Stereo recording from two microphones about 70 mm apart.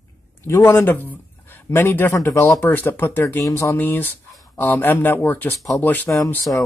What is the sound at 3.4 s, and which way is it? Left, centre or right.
Speech, left.